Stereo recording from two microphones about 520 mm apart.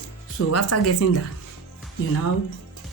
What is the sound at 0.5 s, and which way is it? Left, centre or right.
Speech, left.